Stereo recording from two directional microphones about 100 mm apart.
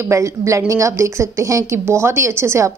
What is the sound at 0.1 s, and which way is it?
A woman's voice, 30° right (ahead or behind).